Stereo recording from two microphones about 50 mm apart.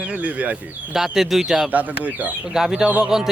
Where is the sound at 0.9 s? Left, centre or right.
Centre.